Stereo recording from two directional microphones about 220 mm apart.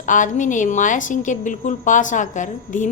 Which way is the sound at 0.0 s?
35° left (ahead or behind).